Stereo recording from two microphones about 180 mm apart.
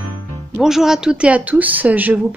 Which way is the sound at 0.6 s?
Centre (ahead or behind).